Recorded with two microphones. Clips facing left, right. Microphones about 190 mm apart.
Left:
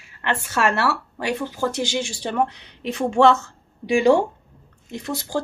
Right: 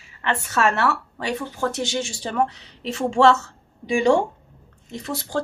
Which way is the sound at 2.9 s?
15° left (ahead or behind).